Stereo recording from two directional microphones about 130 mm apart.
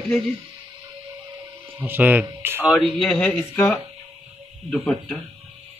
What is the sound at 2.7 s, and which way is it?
Speech, centre (ahead or behind).